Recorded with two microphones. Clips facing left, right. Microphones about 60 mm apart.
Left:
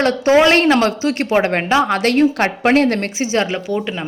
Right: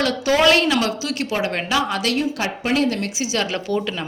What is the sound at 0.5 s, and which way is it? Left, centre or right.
A woman's voice, left.